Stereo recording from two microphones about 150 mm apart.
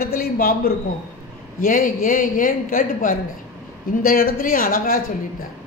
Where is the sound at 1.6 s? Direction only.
65° left (ahead or behind).